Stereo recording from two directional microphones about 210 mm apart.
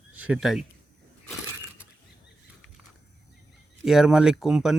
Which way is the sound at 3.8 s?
Centre (ahead or behind).